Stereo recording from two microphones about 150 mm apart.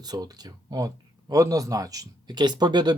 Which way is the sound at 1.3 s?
25° right (ahead or behind).